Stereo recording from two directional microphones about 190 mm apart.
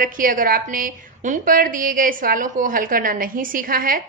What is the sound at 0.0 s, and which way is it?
A woman's voice, 45° right (ahead or behind).